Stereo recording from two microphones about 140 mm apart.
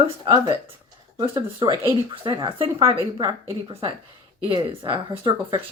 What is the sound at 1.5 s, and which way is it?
Speech, 30° right (ahead or behind).